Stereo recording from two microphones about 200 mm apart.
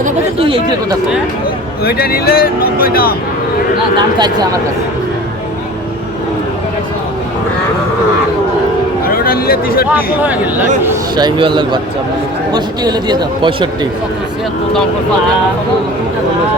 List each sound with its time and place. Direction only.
0.3 s a man's voice: 25° right (ahead or behind)
1.8 s speech: 50° left (ahead or behind)
3.9 s a man's voice: 20° right (ahead or behind)
9.0 s a sound: 45° left (ahead or behind)
9.9 s speech: 10° right (ahead or behind)
11.1 s a man's voice: 20° right (ahead or behind)